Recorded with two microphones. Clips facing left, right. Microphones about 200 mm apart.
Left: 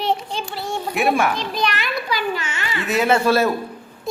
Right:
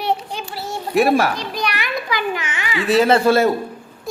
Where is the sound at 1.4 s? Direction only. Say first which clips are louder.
Left 1 dB; 15° right (ahead or behind).